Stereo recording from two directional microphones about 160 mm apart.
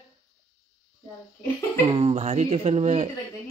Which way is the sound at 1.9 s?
40° right (ahead or behind).